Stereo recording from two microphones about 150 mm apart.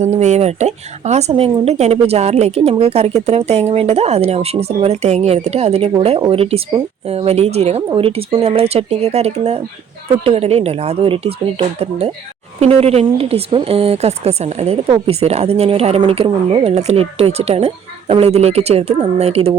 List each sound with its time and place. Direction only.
0.0 s speech: 50° right (ahead or behind)